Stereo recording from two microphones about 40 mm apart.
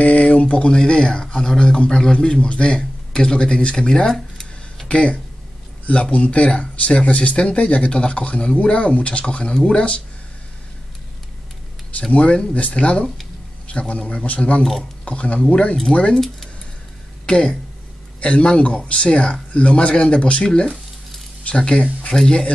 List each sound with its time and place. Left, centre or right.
0.0 s speech: left; by 4.5 s centre
4.8 s speech: left
12.1 s speech: left
17.3 s speech: left
22.1 s speech: centre